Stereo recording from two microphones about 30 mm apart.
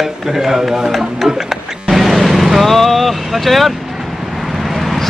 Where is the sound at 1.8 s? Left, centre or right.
Centre.